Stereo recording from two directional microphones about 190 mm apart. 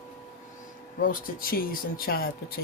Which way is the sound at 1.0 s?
50° left (ahead or behind).